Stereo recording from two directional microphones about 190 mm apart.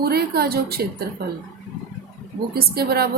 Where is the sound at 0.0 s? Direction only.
55° right (ahead or behind).